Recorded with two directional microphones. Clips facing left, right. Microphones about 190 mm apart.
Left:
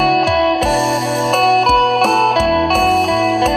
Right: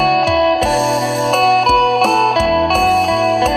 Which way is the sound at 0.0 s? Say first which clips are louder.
Even; centre (ahead or behind).